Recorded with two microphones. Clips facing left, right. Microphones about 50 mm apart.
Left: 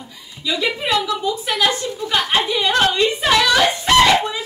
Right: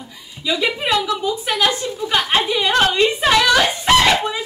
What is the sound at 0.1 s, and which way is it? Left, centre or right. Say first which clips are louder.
Chuckle: right 2 dB; centre.